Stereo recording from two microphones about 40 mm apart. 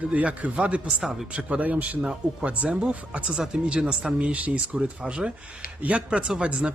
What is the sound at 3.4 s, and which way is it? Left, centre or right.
Speech, right.